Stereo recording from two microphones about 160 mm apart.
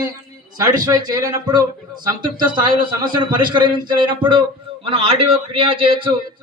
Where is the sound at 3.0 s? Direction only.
30° right (ahead or behind).